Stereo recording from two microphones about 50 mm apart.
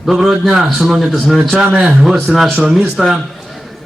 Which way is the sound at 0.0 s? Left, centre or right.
Centre.